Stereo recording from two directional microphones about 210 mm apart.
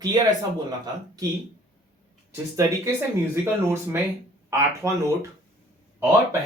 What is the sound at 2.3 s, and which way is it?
Speech, 15° right (ahead or behind).